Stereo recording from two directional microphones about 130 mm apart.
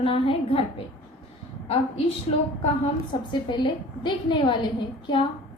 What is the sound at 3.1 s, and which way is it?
A woman's voice, 35° left (ahead or behind).